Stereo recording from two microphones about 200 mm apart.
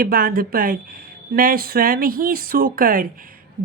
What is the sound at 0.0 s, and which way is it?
Speech, 45° right (ahead or behind).